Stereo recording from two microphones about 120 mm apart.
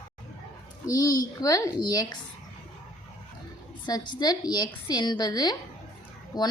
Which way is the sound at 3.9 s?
35° left (ahead or behind).